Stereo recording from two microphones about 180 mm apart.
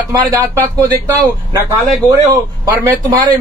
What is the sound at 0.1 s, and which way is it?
Speech, 20° right (ahead or behind).